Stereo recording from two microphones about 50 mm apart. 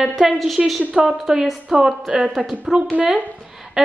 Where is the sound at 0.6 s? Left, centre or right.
Centre.